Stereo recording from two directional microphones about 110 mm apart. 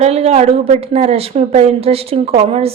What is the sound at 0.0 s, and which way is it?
A woman's voice, 75° right (ahead or behind).